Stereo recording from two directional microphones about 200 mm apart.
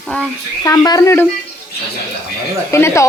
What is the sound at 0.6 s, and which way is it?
Speech, 20° left (ahead or behind).